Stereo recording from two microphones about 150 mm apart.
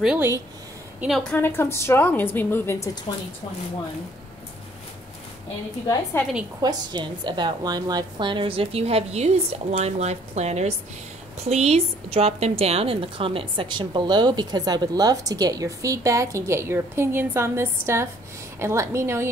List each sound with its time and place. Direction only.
0.0 s a woman's voice: 5° right (ahead or behind)
1.4 s a woman's voice: 15° left (ahead or behind)
6.6 s a woman's voice: 30° right (ahead or behind)